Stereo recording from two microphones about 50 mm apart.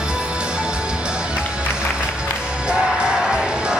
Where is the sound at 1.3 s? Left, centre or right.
Centre.